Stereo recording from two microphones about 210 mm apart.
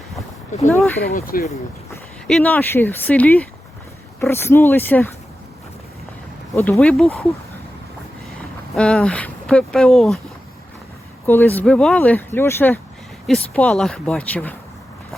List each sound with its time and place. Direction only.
1.0 s speech: 45° left (ahead or behind)
1.9 s speech: 5° left (ahead or behind)
6.5 s speech: 10° left (ahead or behind)
8.7 s speech: 5° left (ahead or behind)
11.3 s speech: 10° left (ahead or behind)